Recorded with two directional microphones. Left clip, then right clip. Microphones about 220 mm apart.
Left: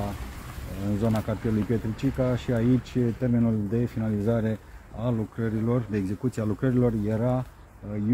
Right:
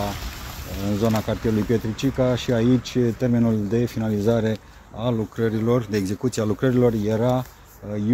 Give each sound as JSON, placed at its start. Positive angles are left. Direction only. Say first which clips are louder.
{"t": 1.0, "sound": "speech", "louder": "right 6 dB", "side_deg": -40}